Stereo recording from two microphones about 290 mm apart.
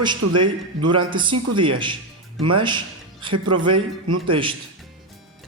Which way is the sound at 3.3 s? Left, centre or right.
Right.